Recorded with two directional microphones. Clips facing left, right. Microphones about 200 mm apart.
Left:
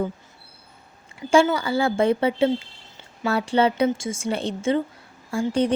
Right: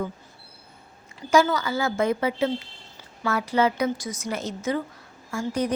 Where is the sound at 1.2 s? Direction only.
25° left (ahead or behind).